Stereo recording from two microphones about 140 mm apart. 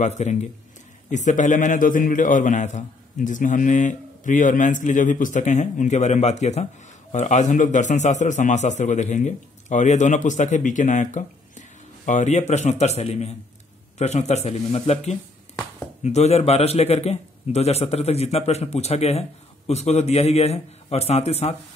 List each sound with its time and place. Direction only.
0.0 s a man's voice: 60° left (ahead or behind)